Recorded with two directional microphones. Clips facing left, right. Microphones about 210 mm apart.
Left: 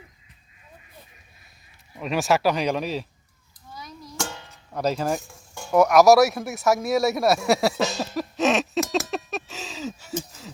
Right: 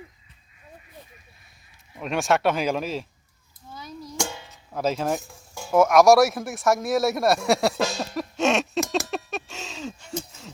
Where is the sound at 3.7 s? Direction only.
25° right (ahead or behind).